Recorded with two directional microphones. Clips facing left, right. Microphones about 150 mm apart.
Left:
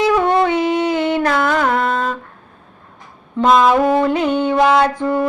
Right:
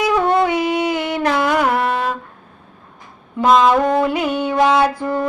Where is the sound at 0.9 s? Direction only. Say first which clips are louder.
Left 4 dB; 25° left (ahead or behind).